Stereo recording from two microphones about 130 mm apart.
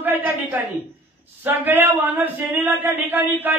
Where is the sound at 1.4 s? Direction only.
15° right (ahead or behind).